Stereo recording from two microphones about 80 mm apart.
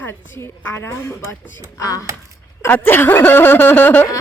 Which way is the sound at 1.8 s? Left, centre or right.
Left.